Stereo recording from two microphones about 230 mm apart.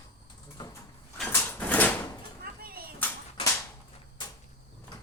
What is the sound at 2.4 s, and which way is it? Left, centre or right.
Artillery fire, right.